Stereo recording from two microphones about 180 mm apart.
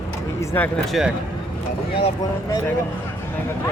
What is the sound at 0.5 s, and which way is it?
Speech, 10° left (ahead or behind).